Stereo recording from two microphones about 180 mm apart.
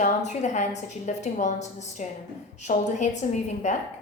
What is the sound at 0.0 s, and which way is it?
A woman's voice, 40° left (ahead or behind).